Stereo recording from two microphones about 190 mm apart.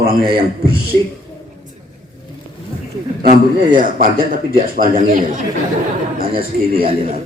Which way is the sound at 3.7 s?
45° right (ahead or behind).